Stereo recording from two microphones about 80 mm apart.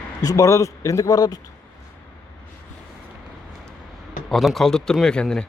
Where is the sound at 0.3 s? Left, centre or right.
Left.